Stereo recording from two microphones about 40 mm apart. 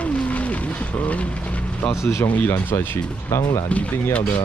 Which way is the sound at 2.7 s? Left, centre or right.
Left.